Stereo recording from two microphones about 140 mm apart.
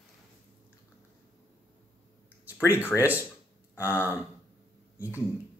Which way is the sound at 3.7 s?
20° left (ahead or behind).